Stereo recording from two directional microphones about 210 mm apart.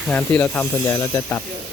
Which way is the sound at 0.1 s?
10° left (ahead or behind).